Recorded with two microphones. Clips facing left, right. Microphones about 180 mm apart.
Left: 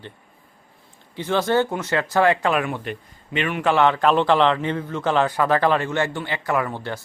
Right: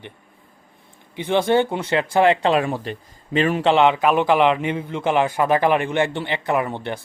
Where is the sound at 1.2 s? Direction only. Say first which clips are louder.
Right 2 dB; 15° right (ahead or behind); by 3.6 s 35° right (ahead or behind).